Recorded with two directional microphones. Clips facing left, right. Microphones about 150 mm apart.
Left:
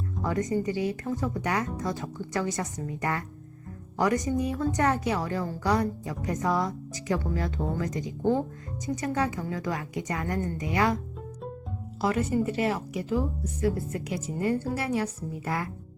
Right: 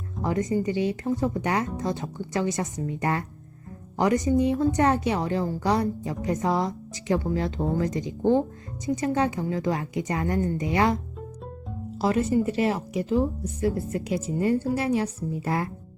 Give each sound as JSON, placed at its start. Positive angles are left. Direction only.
{"t": 0.2, "sound": "a woman's voice", "side_deg": -25}
{"t": 12.0, "sound": "a woman's voice", "side_deg": -25}